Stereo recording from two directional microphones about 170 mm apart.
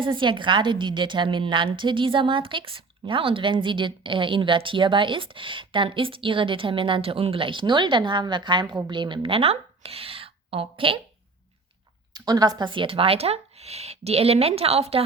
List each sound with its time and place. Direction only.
0.0 s a woman's voice: 30° right (ahead or behind)
12.1 s speech: 25° right (ahead or behind)